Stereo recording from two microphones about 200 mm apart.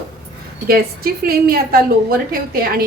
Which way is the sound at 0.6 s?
50° right (ahead or behind).